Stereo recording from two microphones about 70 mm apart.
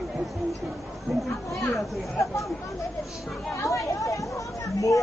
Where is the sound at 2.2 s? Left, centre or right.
Left.